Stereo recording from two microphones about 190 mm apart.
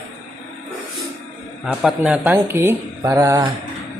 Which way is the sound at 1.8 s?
5° right (ahead or behind).